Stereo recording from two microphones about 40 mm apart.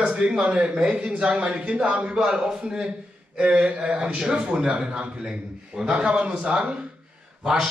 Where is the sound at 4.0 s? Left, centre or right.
Centre.